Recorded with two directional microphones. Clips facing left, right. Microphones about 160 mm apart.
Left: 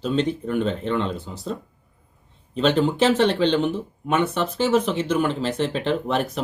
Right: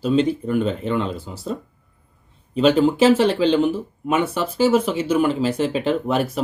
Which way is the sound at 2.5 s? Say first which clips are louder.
Right 4 dB; 5° right (ahead or behind).